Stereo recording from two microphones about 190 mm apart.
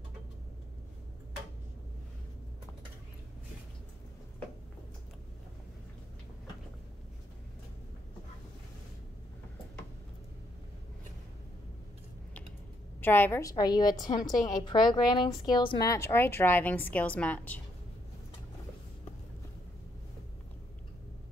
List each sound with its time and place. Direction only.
13.0 s a woman's voice: 10° left (ahead or behind)